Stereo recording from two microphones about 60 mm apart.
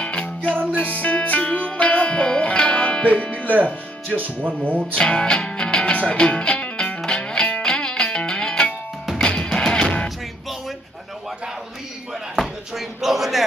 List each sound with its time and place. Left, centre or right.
0.0 s music: left
4.1 s speech: right
4.9 s speech: centre
7.1 s music: centre
12.1 s a sound: centre